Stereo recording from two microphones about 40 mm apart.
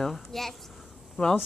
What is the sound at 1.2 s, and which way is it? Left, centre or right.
Speech, left.